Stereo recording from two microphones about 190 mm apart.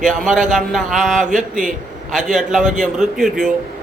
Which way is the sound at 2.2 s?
Centre (ahead or behind).